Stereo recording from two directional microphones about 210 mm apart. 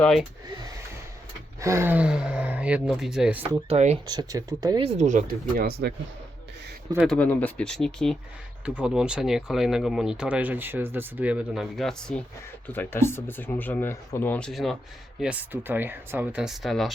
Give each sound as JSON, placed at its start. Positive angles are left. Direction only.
{"t": 0.0, "sound": "speech", "side_deg": 0}
{"t": 1.6, "sound": "speech", "side_deg": -10}
{"t": 3.5, "sound": "speech", "side_deg": -30}
{"t": 4.0, "sound": "speech", "side_deg": -20}
{"t": 4.8, "sound": "speech", "side_deg": -30}
{"t": 6.9, "sound": "speech", "side_deg": -5}
{"t": 7.2, "sound": "speech", "side_deg": 5}